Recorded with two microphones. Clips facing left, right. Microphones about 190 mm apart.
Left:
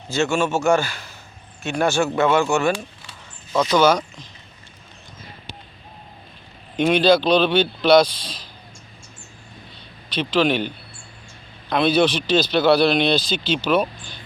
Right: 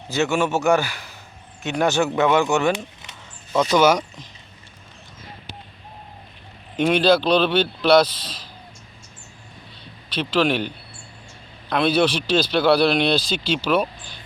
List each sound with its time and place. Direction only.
0.1 s speech: 15° right (ahead or behind)
3.5 s speech: 10° right (ahead or behind)
6.7 s speech: 5° right (ahead or behind)
10.2 s a man's voice: 5° right (ahead or behind)
11.7 s speech: 5° right (ahead or behind)